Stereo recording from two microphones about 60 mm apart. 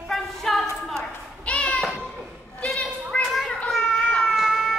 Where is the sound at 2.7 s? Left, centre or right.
Centre.